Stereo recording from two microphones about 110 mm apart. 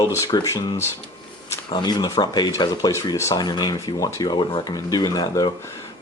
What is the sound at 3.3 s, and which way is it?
Speech, 40° left (ahead or behind).